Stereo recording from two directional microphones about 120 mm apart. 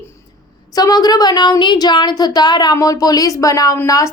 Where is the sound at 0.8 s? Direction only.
35° left (ahead or behind).